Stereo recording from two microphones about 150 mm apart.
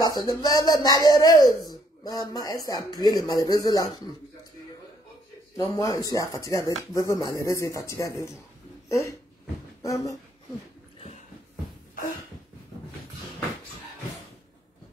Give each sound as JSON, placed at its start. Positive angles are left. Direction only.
{"t": 0.0, "sound": "speech", "side_deg": 25}
{"t": 5.8, "sound": "speech", "side_deg": 25}
{"t": 9.8, "sound": "a sound", "side_deg": 20}
{"t": 11.0, "sound": "music", "side_deg": 45}